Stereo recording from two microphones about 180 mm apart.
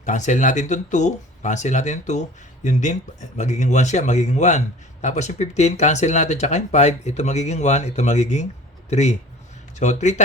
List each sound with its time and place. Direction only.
0.0 s speech: 45° left (ahead or behind)